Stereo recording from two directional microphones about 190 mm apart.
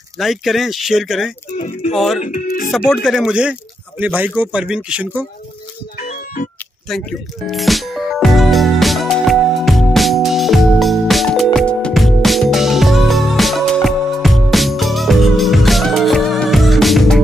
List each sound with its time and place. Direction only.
0.2 s speech: centre (ahead or behind)
1.6 s speech: 40° left (ahead or behind)
2.9 s a man's voice: centre (ahead or behind)
6.0 s music: 40° left (ahead or behind)
6.9 s music: centre (ahead or behind)